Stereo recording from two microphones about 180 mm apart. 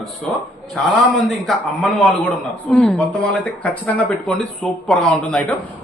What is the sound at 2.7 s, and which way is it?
Speech, 5° left (ahead or behind).